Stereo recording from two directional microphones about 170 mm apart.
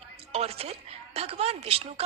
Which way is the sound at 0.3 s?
35° right (ahead or behind).